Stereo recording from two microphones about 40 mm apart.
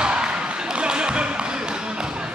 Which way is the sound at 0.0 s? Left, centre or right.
Right.